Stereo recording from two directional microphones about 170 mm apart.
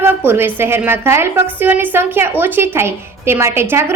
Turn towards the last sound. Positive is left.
turn(degrees=-15)  # may be behind; listen again after turning